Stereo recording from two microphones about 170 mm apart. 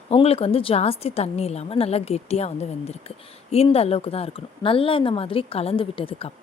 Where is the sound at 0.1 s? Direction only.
35° left (ahead or behind).